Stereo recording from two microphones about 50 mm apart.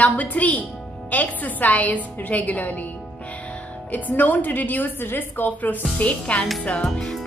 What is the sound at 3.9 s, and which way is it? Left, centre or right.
A woman's voice, left.